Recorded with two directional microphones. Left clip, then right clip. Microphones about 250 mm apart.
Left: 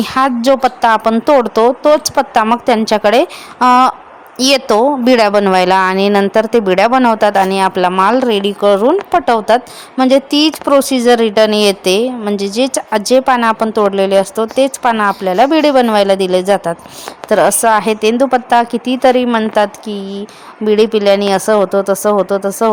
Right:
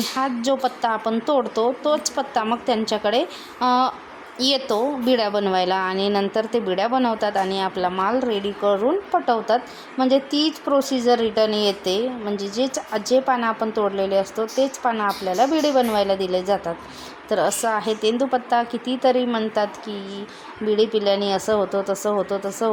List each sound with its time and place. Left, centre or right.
0.0 s a woman's voice: left